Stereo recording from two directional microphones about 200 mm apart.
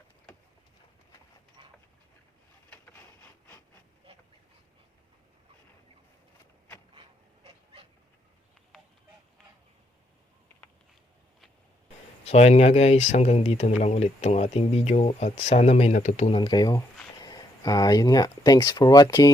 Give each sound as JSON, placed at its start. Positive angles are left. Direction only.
{"t": 7.4, "sound": "dog", "side_deg": -25}
{"t": 12.2, "sound": "speech", "side_deg": 35}
{"t": 16.4, "sound": "speech", "side_deg": 20}